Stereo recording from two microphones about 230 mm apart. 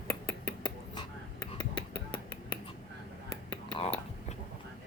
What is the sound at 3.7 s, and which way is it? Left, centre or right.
Whispering, left.